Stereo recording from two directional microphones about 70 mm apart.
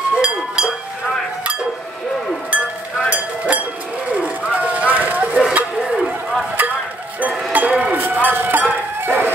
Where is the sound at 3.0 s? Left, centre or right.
Centre.